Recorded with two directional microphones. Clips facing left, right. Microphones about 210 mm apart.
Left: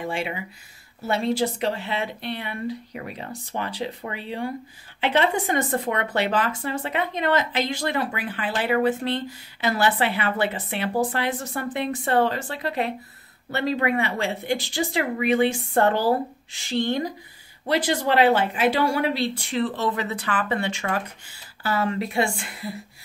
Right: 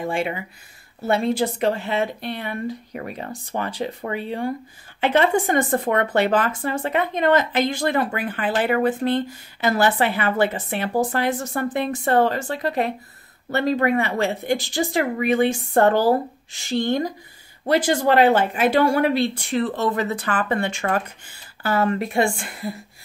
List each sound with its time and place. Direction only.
0.0 s speech: 50° right (ahead or behind)